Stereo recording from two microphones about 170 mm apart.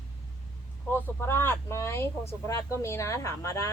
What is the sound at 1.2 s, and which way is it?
Speech, 15° left (ahead or behind).